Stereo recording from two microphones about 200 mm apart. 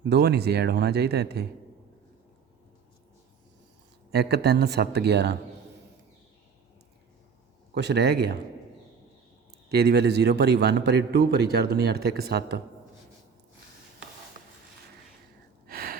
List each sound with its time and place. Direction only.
0.0 s a man's voice: 55° right (ahead or behind)
4.1 s a man's voice: 55° right (ahead or behind)
7.7 s a man's voice: 55° right (ahead or behind)
9.6 s a man's voice: 55° right (ahead or behind)
15.6 s a sound: 45° right (ahead or behind)